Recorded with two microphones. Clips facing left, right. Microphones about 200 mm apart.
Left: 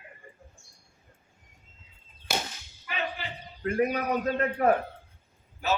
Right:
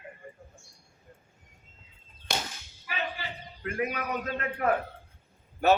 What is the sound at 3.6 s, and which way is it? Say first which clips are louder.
A man's voice: left 5 dB; 35° left (ahead or behind).